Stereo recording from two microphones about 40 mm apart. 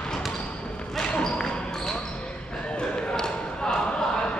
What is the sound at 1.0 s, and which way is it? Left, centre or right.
Basketball bounce, left.